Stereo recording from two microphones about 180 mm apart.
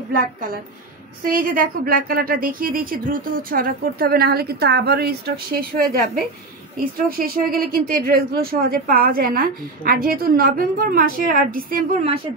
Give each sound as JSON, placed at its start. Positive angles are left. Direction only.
{"t": 0.1, "sound": "speech", "side_deg": -50}